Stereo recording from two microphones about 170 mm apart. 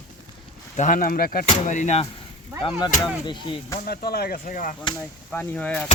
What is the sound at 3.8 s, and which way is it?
Arrow, 65° left (ahead or behind).